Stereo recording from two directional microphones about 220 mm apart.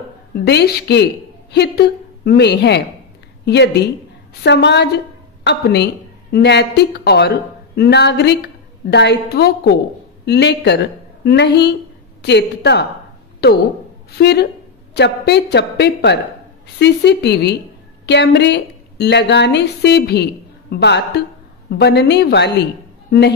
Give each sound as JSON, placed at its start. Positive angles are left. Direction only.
{"t": 0.5, "sound": "a woman's voice", "side_deg": 50}